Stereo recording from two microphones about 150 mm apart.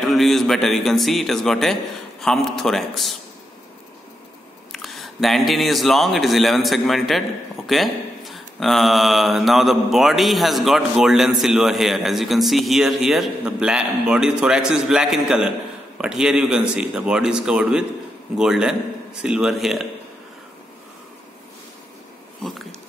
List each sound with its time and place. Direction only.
0.0 s speech: centre (ahead or behind)
4.7 s speech: centre (ahead or behind)